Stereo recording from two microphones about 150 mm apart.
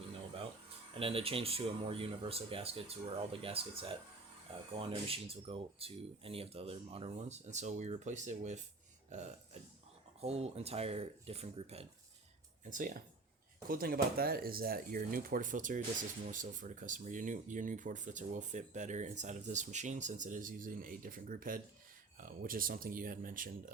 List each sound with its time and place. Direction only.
0.9 s speech: 40° right (ahead or behind)
9.0 s burping: 50° right (ahead or behind)
10.2 s speech: 45° right (ahead or behind)
12.7 s speech: 65° right (ahead or behind)
13.7 s speech: 75° right (ahead or behind)